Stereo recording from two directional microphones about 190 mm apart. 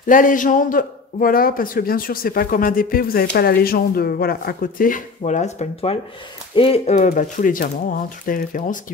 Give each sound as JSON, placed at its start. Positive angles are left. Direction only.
{"t": 0.0, "sound": "a man's voice", "side_deg": 45}